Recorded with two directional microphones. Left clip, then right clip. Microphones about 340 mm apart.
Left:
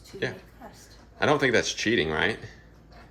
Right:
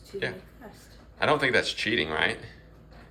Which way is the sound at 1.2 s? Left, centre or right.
Centre.